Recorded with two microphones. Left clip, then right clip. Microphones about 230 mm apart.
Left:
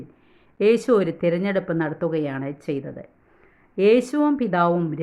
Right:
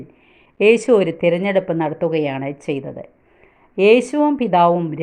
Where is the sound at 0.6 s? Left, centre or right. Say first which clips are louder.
Right 5 dB; centre.